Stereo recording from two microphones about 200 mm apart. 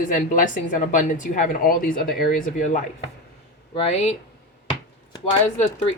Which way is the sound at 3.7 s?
30° left (ahead or behind).